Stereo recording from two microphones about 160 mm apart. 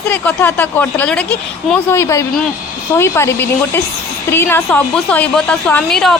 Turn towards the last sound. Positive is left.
turn(degrees=5)  # may be behind; listen again after turning